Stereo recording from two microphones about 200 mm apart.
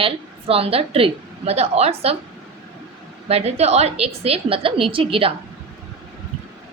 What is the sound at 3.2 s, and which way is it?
A woman's voice, 30° right (ahead or behind).